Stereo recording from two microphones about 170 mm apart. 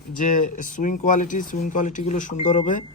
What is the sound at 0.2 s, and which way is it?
Speech, 50° left (ahead or behind).